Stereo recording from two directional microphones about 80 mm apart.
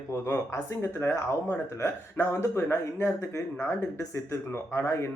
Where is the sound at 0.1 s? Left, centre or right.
Left.